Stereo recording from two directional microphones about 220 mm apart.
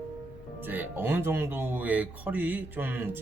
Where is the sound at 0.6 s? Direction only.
10° right (ahead or behind).